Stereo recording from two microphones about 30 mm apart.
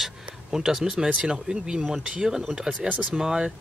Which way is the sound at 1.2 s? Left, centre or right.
Right.